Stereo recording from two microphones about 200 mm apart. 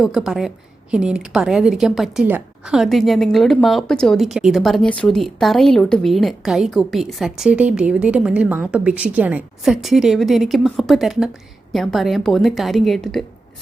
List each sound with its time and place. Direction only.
0.0 s a woman's voice: centre (ahead or behind)